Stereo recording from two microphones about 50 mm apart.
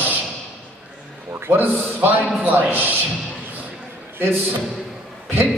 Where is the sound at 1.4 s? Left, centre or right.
Right.